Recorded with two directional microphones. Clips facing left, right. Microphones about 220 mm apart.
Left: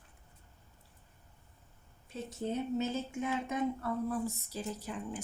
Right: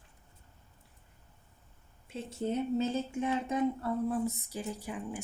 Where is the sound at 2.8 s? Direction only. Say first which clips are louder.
Right 3 dB; 30° right (ahead or behind); by 5.2 s 10° right (ahead or behind).